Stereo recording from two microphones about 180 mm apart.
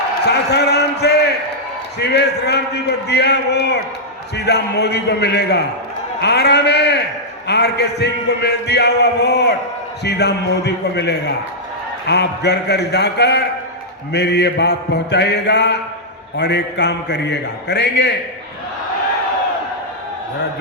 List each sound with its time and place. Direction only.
0.3 s a man's voice: 70° left (ahead or behind)